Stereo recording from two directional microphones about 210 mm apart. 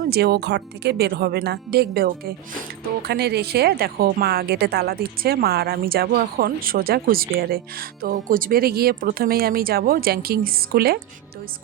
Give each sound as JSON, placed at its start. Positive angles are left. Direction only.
{"t": 0.0, "sound": "speech", "side_deg": -50}